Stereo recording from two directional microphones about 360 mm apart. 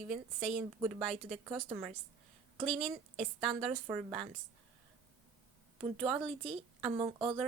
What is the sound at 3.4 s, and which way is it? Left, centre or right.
Speech, centre.